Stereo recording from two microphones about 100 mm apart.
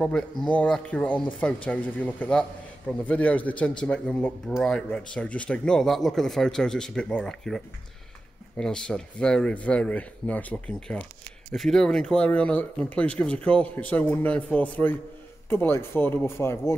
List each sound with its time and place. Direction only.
0.0 s speech: 5° left (ahead or behind); by 16.7 s 25° left (ahead or behind)